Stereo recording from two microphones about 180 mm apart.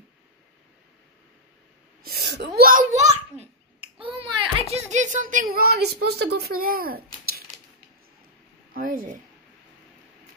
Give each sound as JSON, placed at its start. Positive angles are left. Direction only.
{"t": 2.0, "sound": "speech", "side_deg": -65}
{"t": 3.3, "sound": "a sound", "side_deg": -30}
{"t": 8.7, "sound": "speech", "side_deg": -50}